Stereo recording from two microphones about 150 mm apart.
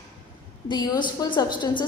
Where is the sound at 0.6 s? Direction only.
30° left (ahead or behind).